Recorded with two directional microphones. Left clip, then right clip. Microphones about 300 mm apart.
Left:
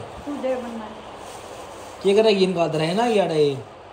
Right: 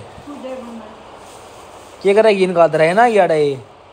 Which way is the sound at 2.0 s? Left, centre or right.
Centre.